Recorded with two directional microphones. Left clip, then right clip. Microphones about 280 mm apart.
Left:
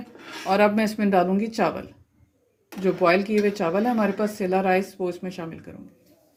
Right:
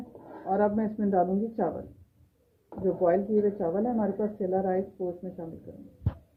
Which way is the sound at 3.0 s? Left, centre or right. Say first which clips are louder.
Left 4 dB; left.